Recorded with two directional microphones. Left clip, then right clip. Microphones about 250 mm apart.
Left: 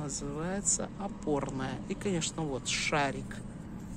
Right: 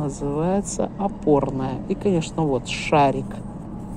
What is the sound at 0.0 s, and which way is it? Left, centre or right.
A woman's voice, centre.